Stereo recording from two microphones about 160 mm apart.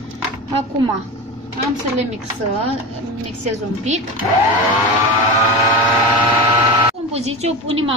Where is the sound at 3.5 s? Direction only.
45° right (ahead or behind).